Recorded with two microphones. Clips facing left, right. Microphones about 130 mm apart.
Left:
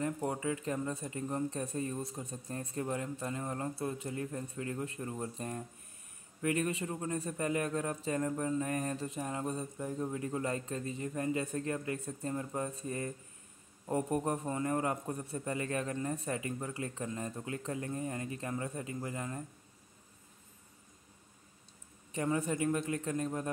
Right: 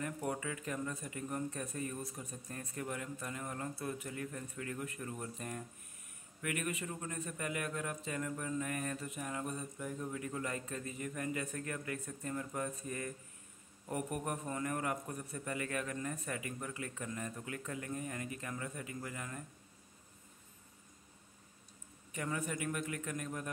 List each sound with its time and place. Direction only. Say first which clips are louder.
0.0 s a man's voice: left 5 dB; 25° left (ahead or behind)
22.1 s a man's voice: left 6 dB; 30° left (ahead or behind)